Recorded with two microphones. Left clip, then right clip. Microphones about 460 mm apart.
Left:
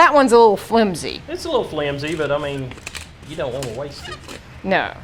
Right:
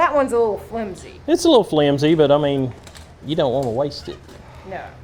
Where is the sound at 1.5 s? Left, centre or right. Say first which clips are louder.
Right 6 dB; right.